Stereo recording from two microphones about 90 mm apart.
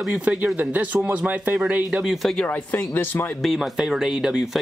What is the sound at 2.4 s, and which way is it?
Speech, 20° left (ahead or behind).